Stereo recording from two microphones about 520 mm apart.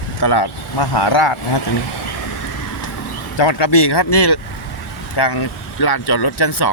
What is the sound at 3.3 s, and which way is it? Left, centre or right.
Speech, left.